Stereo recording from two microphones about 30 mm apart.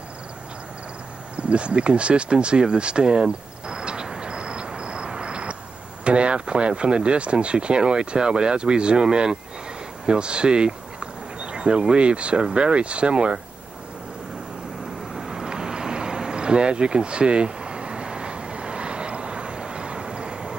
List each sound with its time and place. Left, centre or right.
1.3 s a sound: right
6.0 s speech: right
15.1 s vehicle: centre